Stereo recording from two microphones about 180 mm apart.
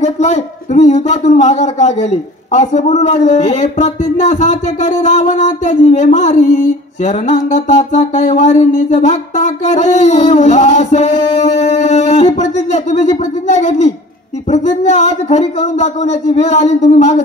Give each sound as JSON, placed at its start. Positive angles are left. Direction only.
{"t": 0.0, "sound": "a man's voice", "side_deg": 40}